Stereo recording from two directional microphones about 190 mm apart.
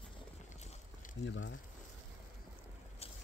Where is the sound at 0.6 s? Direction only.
40° left (ahead or behind).